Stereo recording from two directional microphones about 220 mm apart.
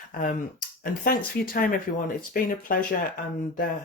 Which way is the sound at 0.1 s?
35° left (ahead or behind).